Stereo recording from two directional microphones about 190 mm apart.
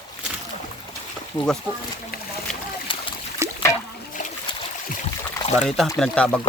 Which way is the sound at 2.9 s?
25° left (ahead or behind).